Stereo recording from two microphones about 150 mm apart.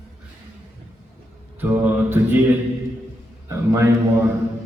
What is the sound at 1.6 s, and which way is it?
Speech, 10° right (ahead or behind).